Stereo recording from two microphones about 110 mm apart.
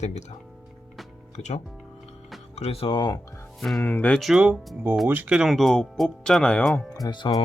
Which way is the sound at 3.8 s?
15° left (ahead or behind).